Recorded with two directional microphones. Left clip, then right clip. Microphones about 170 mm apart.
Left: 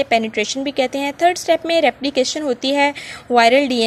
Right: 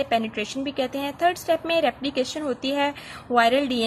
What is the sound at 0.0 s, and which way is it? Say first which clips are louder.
Speech: left 7 dB; 35° left (ahead or behind).